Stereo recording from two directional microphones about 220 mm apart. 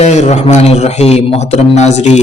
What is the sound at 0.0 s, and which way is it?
A man's voice, 30° left (ahead or behind).